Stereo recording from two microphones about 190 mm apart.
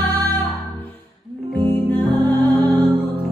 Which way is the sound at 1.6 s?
10° left (ahead or behind).